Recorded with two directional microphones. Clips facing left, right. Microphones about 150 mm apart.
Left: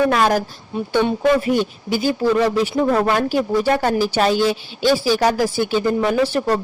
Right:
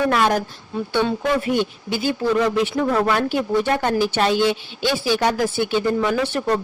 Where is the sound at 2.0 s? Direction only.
35° left (ahead or behind).